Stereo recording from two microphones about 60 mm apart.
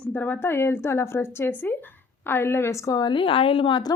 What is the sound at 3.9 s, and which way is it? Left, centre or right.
Speech, left.